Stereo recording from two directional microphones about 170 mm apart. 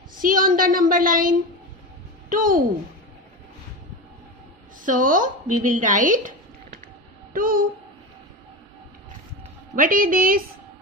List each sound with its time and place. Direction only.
0.1 s a woman's voice: 55° right (ahead or behind)
4.8 s a woman's voice: 50° right (ahead or behind)
7.3 s a woman's voice: 55° right (ahead or behind)
9.8 s a woman's voice: 55° right (ahead or behind)